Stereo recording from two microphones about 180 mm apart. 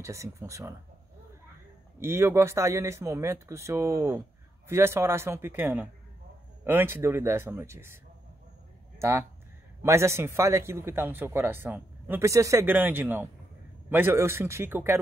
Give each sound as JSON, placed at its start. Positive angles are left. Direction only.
{"t": 0.0, "sound": "speech", "side_deg": -15}
{"t": 2.0, "sound": "speech", "side_deg": -15}
{"t": 9.8, "sound": "speech", "side_deg": -15}